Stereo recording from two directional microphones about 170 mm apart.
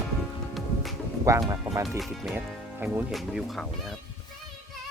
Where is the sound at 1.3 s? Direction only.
20° right (ahead or behind).